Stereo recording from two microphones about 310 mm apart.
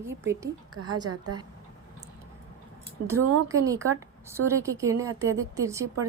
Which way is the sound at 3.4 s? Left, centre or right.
Centre.